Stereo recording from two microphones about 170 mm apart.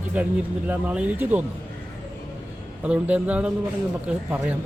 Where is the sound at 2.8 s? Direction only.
10° right (ahead or behind).